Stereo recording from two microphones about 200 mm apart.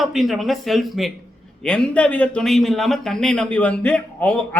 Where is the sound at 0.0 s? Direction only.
Centre (ahead or behind).